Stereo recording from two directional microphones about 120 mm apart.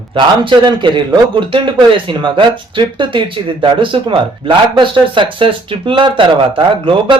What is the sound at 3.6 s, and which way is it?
Speech, 45° right (ahead or behind).